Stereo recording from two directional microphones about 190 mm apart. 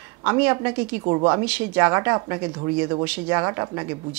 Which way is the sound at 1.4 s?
10° right (ahead or behind).